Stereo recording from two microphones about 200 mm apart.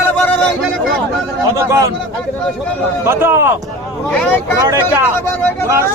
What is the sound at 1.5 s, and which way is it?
Speech, 15° right (ahead or behind).